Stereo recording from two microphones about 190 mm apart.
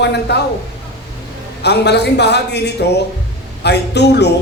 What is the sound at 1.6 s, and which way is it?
A man's voice, 60° left (ahead or behind).